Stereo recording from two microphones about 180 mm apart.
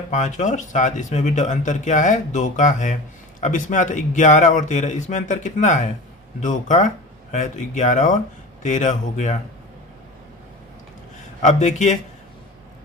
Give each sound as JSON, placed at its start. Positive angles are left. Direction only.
{"t": 0.1, "sound": "speech", "side_deg": 40}
{"t": 11.4, "sound": "a man's voice", "side_deg": 40}